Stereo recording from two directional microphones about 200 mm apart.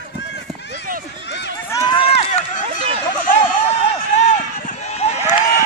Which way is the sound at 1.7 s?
20° left (ahead or behind).